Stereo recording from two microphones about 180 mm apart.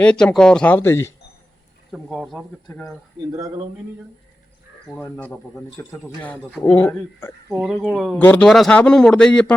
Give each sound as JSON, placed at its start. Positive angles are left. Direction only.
{"t": 0.0, "sound": "speech", "side_deg": 5}
{"t": 1.9, "sound": "a man's voice", "side_deg": 0}
{"t": 3.3, "sound": "speech", "side_deg": -20}
{"t": 5.0, "sound": "a man's voice", "side_deg": 10}